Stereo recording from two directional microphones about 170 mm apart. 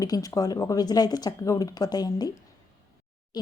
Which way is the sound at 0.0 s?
20° left (ahead or behind).